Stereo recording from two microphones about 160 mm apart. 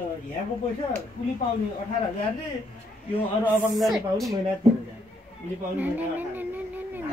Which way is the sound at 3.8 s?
Centre (ahead or behind).